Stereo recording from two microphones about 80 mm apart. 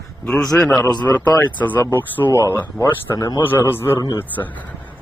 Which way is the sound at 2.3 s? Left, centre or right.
Left.